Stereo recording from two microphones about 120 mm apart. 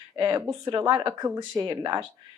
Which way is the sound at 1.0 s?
30° right (ahead or behind).